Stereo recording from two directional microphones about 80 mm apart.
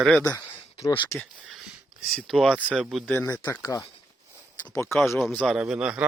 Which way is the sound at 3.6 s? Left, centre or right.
Left.